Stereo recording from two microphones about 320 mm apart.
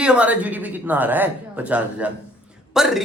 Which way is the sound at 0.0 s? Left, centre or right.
Centre.